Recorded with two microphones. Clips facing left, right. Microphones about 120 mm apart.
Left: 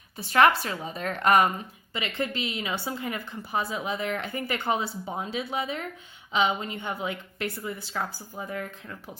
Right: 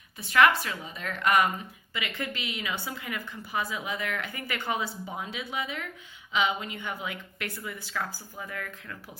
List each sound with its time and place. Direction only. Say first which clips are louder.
0.2 s a woman's voice: left 2 dB; 35° left (ahead or behind)